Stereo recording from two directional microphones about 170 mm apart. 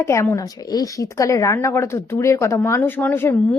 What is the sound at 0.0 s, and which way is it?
A woman's voice, 15° left (ahead or behind).